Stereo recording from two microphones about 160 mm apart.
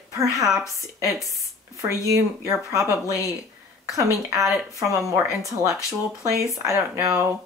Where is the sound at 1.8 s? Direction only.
20° right (ahead or behind).